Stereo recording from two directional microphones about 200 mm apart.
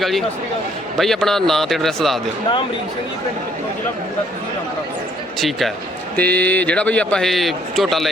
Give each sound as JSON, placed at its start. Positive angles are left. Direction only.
{"t": 0.0, "sound": "a man's voice", "side_deg": 0}
{"t": 5.4, "sound": "a man's voice", "side_deg": 0}